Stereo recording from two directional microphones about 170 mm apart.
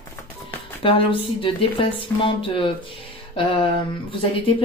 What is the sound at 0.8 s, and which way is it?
Speech, 30° left (ahead or behind).